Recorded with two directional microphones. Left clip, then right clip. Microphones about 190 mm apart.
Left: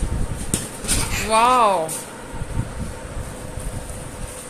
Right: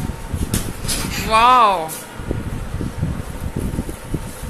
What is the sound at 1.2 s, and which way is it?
Speech, 5° left (ahead or behind).